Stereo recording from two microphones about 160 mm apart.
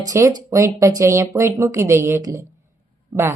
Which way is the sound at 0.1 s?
20° right (ahead or behind).